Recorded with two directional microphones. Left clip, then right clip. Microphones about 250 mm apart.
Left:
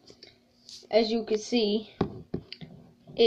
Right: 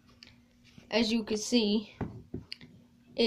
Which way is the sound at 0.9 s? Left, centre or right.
Right.